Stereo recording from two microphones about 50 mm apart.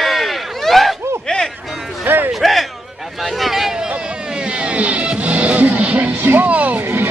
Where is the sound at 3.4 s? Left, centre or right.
Centre.